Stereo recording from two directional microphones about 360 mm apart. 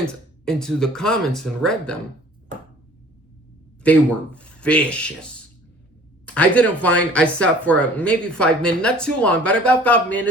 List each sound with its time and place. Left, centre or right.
0.4 s speech: centre
3.8 s speech: centre